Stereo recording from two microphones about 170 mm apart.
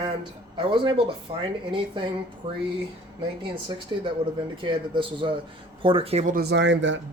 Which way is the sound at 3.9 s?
25° right (ahead or behind).